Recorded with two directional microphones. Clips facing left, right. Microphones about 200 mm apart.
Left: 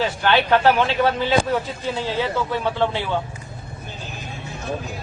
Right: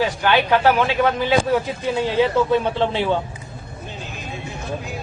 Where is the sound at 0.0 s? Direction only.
10° right (ahead or behind).